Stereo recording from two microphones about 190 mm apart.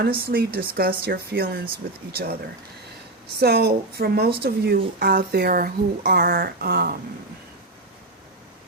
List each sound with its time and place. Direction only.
0.0 s speech: 55° right (ahead or behind)
3.3 s a woman's voice: 60° right (ahead or behind)